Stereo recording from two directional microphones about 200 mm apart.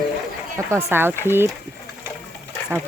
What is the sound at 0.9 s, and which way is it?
Speech, 10° right (ahead or behind).